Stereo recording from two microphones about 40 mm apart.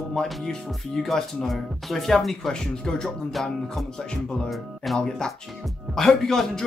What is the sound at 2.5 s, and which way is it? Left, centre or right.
Speech, centre.